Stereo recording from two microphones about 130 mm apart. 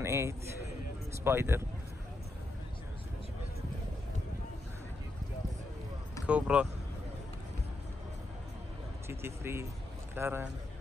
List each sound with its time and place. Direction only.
0.0 s a man's voice: 20° right (ahead or behind)
6.2 s speech: 10° right (ahead or behind)
9.0 s a man's voice: 20° right (ahead or behind)